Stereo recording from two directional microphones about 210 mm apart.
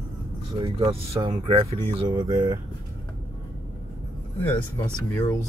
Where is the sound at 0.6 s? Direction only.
25° right (ahead or behind).